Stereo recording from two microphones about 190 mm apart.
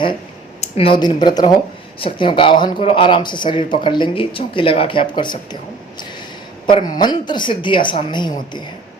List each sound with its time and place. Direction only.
0.6 s speech: 30° left (ahead or behind)
6.7 s speech: 25° left (ahead or behind)